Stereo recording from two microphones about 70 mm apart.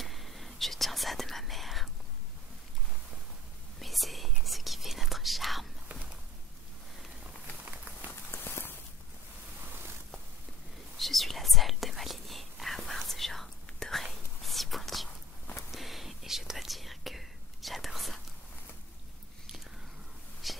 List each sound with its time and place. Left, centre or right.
0.0 s whispering: centre
3.8 s whispering: centre
8.3 s walk: left
11.0 s whispering: centre
20.4 s a sound: centre